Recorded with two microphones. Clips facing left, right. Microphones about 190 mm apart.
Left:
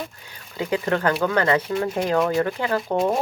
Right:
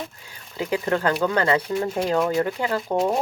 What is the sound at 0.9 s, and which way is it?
Speech, 20° right (ahead or behind).